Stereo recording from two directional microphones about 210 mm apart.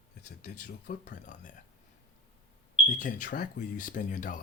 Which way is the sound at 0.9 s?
40° left (ahead or behind).